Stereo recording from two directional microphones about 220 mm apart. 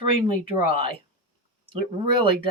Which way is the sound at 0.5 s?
40° left (ahead or behind).